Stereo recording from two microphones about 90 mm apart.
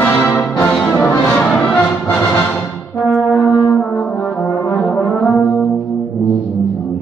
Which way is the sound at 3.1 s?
10° left (ahead or behind).